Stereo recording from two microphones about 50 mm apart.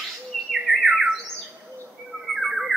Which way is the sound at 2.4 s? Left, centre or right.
Centre.